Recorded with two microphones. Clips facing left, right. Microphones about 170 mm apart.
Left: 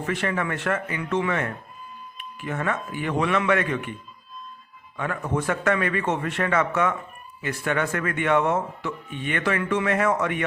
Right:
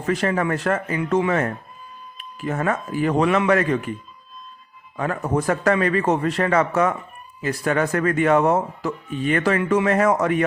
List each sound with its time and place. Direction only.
0.0 s speech: 40° right (ahead or behind)
4.9 s speech: 35° right (ahead or behind)